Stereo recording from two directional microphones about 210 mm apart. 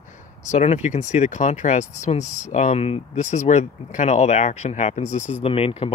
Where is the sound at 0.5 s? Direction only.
35° left (ahead or behind).